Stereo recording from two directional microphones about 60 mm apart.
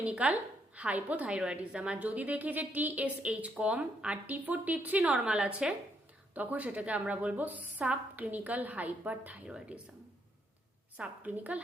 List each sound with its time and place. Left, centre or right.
0.0 s a woman's voice: right
10.9 s a woman's voice: right